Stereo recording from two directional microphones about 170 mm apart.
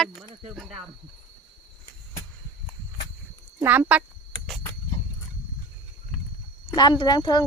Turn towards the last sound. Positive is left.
turn(degrees=25)  # may be behind; listen again after turning